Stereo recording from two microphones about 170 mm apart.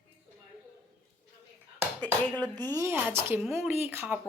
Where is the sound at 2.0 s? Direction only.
5° left (ahead or behind).